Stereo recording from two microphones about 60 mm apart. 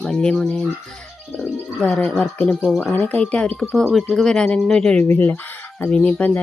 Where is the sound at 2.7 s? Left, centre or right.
Centre.